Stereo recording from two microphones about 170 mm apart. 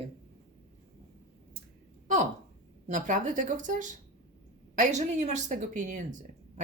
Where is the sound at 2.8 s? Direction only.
50° right (ahead or behind).